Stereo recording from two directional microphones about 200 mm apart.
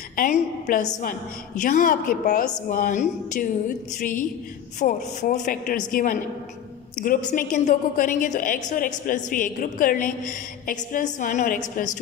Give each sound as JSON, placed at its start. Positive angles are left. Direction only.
{"t": 0.1, "sound": "a woman's voice", "side_deg": 40}